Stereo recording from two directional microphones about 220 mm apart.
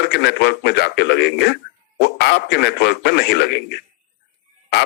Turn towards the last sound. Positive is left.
turn(degrees=50)  # may be behind; listen again after turning